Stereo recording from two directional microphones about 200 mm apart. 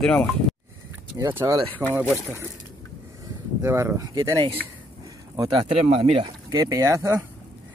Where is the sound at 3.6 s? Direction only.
15° right (ahead or behind); by 6.2 s 30° right (ahead or behind).